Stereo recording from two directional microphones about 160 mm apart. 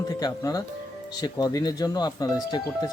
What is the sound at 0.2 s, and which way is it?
Speech, 25° left (ahead or behind).